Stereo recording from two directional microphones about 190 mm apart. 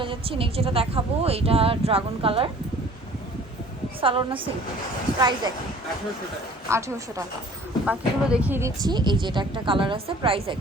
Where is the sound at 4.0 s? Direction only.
25° right (ahead or behind).